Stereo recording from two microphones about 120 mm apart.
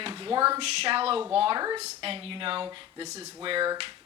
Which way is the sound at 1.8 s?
50° right (ahead or behind).